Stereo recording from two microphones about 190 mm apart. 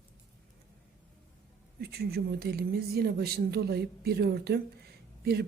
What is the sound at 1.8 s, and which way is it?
Speech, 55° right (ahead or behind).